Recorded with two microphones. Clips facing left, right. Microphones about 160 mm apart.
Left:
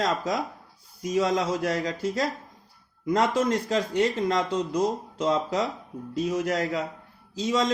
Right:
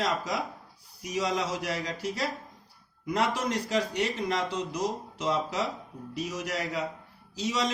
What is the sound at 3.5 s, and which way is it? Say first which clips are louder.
Speech: left 4 dB; 50° left (ahead or behind).